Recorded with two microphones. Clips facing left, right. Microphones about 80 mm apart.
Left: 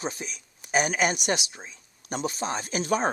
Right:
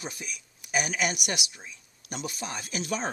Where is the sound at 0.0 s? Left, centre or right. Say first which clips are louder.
Left 5 dB; left.